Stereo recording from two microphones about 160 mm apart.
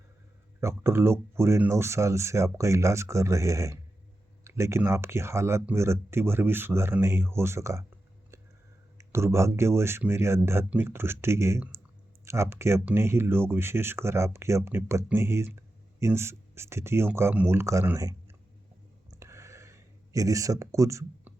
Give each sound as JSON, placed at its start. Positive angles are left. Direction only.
{"t": 0.6, "sound": "speech", "side_deg": -15}
{"t": 9.0, "sound": "speech", "side_deg": -15}
{"t": 19.1, "sound": "a sound", "side_deg": -20}